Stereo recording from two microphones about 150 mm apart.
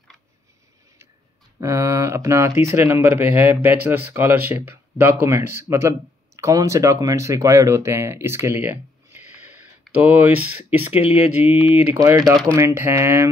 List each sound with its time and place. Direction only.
1.6 s speech: 20° right (ahead or behind)